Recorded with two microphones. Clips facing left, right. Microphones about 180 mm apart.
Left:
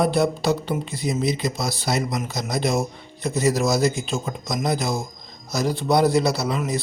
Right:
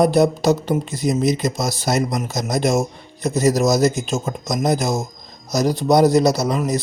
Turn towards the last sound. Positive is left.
turn(degrees=-40)  # may be behind; listen again after turning